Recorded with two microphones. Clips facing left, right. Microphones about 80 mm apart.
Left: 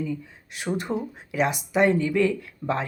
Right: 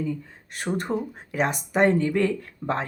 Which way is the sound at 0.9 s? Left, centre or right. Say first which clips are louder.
Right 2 dB; right.